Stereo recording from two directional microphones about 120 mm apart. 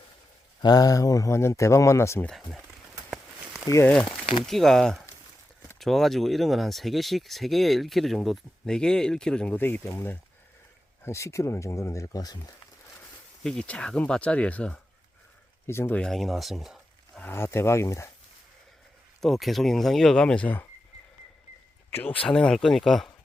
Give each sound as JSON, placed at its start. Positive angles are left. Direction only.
{"t": 0.6, "sound": "speech", "side_deg": 35}
{"t": 2.2, "sound": "speech", "side_deg": 0}
{"t": 3.1, "sound": "walk", "side_deg": -5}
{"t": 3.8, "sound": "speech", "side_deg": 10}
{"t": 13.4, "sound": "speech", "side_deg": 5}
{"t": 16.0, "sound": "speech", "side_deg": 5}
{"t": 17.2, "sound": "speech", "side_deg": 20}
{"t": 19.2, "sound": "speech", "side_deg": 0}
{"t": 21.9, "sound": "speech", "side_deg": 15}